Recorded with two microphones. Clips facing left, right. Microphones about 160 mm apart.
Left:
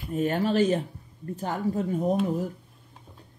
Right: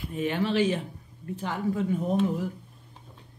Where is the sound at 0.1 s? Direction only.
45° left (ahead or behind).